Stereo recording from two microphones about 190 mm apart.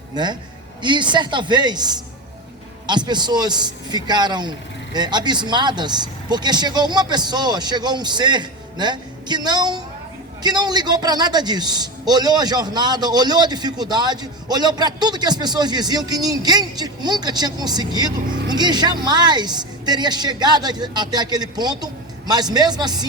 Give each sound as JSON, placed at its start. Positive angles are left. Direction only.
{"t": 0.1, "sound": "a man's voice", "side_deg": -20}